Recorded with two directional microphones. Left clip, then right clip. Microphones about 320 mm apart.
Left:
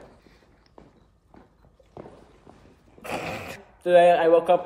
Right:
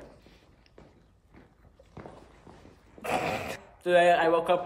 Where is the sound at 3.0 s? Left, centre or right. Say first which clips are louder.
Right 2 dB; right.